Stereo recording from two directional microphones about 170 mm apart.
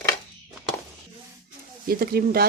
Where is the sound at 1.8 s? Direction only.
65° right (ahead or behind).